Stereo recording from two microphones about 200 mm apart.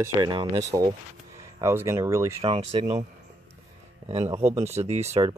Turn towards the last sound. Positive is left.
turn(degrees=-35)  # may be behind; listen again after turning